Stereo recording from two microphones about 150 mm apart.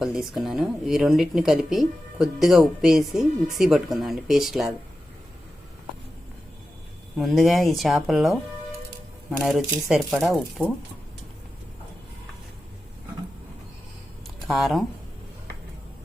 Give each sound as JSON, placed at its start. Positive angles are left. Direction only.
{"t": 0.0, "sound": "a woman's voice", "side_deg": 0}
{"t": 7.2, "sound": "a woman's voice", "side_deg": 0}
{"t": 9.4, "sound": "a woman's voice", "side_deg": 0}
{"t": 14.4, "sound": "speech", "side_deg": 0}